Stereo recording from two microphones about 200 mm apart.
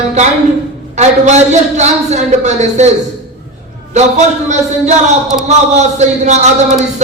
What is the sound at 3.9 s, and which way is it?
A man's voice, 35° right (ahead or behind).